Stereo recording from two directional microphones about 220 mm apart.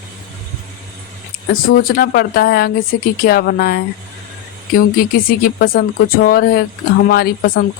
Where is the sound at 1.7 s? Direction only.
40° left (ahead or behind).